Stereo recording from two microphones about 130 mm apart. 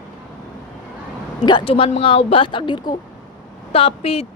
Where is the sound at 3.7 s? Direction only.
45° left (ahead or behind).